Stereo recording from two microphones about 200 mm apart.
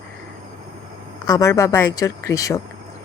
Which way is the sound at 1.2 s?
15° left (ahead or behind).